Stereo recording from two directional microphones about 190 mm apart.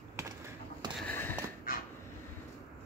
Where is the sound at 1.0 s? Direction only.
10° left (ahead or behind).